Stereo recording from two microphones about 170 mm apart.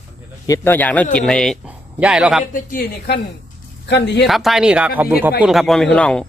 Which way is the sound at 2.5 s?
60° left (ahead or behind).